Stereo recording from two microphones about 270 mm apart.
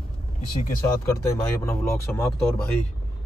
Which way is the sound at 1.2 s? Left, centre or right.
Centre.